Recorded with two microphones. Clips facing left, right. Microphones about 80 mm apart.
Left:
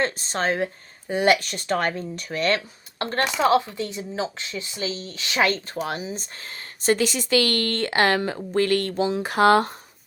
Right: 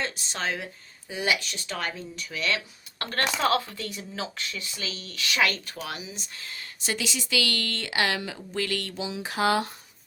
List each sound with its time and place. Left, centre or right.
0.0 s speech: left
3.0 s speech: left